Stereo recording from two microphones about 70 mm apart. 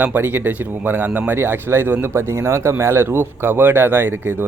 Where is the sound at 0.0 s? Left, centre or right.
Right.